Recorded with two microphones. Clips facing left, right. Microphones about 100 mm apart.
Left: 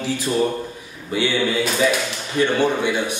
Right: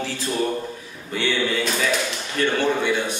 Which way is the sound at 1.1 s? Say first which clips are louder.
Left 3 dB; 10° left (ahead or behind).